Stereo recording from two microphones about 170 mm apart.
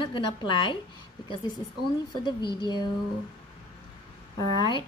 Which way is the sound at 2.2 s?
25° left (ahead or behind).